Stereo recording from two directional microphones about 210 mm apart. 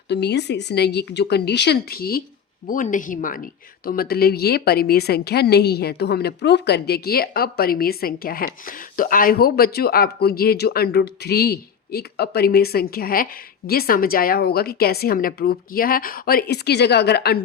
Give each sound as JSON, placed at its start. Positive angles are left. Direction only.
{"t": 0.1, "sound": "speech", "side_deg": 55}